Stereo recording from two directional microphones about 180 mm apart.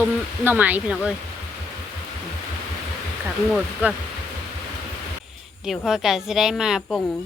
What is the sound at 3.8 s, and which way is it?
Speech, 10° right (ahead or behind).